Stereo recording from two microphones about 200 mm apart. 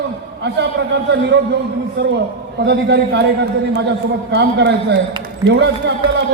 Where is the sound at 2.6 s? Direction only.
55° right (ahead or behind).